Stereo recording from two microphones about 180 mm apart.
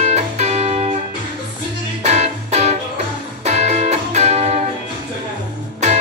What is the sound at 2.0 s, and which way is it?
Music, 40° right (ahead or behind).